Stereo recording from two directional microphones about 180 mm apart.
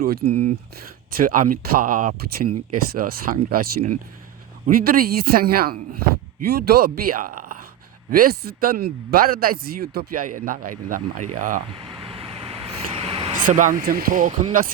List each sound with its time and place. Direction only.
0.0 s speech: 60° right (ahead or behind)
0.3 s speech: 35° right (ahead or behind)
1.1 s speech: 50° right (ahead or behind)
11.7 s vehicle: 30° right (ahead or behind)
13.4 s speech: 45° right (ahead or behind)